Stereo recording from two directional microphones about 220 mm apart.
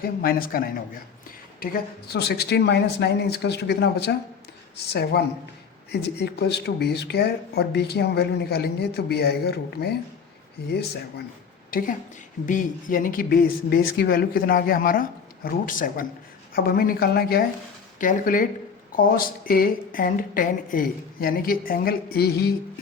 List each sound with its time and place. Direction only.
0.0 s a woman's voice: 40° left (ahead or behind)
11.7 s a woman's voice: 40° left (ahead or behind)